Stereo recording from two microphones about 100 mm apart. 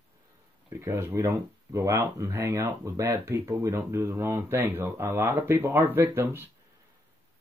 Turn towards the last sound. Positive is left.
turn(degrees=-25)  # may be behind; listen again after turning